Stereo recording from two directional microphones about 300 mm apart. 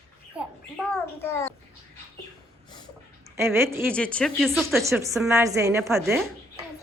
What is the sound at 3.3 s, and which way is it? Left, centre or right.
Speech, centre.